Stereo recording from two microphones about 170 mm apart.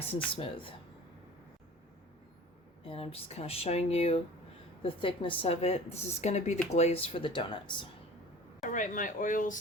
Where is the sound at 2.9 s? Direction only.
35° left (ahead or behind).